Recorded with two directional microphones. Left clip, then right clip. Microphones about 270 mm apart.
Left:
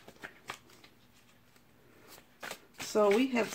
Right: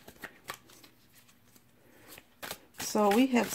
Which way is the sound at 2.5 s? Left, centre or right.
Right.